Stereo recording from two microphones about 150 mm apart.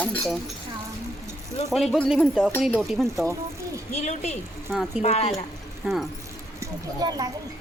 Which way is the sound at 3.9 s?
50° left (ahead or behind).